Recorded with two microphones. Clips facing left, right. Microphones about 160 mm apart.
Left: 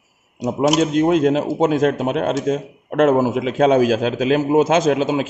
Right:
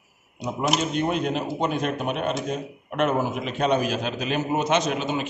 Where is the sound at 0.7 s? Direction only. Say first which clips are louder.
Left 9 dB; 90° left.